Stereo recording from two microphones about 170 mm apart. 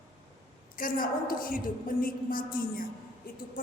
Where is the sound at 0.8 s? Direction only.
55° left (ahead or behind).